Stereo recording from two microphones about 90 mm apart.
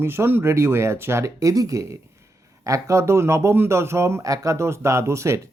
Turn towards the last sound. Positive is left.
turn(degrees=-35)  # may be behind; listen again after turning